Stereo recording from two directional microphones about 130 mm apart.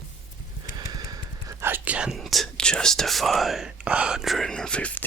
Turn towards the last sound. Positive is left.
turn(degrees=10)  # may be behind; listen again after turning